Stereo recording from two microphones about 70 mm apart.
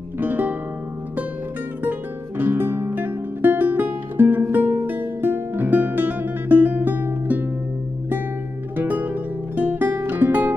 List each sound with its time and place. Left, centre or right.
0.2 s music: right
1.8 s music: right
8.7 s music: right